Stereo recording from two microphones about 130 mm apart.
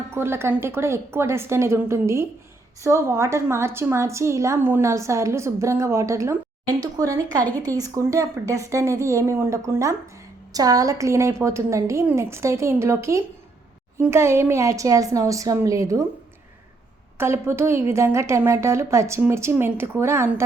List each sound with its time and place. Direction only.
0.1 s a woman's voice: 20° right (ahead or behind)
17.2 s a woman's voice: 20° right (ahead or behind)